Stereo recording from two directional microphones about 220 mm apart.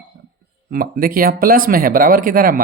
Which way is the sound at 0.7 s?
40° right (ahead or behind).